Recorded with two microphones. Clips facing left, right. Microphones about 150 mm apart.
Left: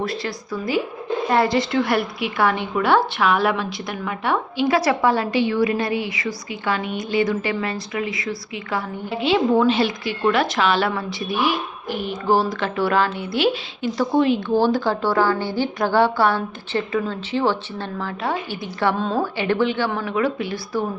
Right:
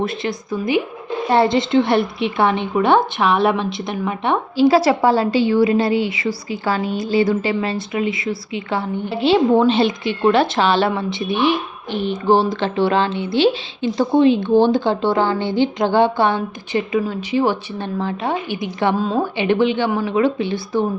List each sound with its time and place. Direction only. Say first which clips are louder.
0.0 s a woman's voice: right 4 dB; 20° right (ahead or behind)
18.9 s a woman's voice: right 3 dB; 5° right (ahead or behind)
19.2 s a woman's voice: right 4 dB; 20° right (ahead or behind)
20.1 s a woman's voice: right 4 dB; 25° right (ahead or behind)